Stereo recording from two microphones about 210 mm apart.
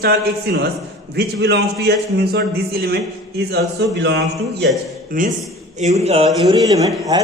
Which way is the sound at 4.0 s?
55° right (ahead or behind).